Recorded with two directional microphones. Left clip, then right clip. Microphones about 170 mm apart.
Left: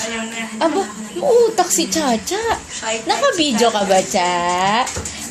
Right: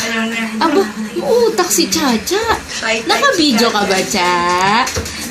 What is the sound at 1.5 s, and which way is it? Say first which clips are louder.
A woman's voice: right 3 dB; 45° left (ahead or behind).